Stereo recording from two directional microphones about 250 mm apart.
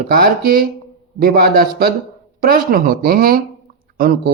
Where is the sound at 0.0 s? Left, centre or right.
Right.